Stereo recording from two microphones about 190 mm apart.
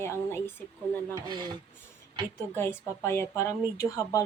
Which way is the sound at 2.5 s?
10° left (ahead or behind).